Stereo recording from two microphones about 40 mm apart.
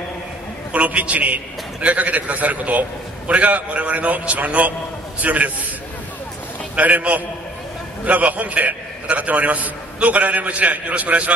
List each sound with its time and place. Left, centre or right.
0.7 s a man's voice: right
6.7 s a man's voice: right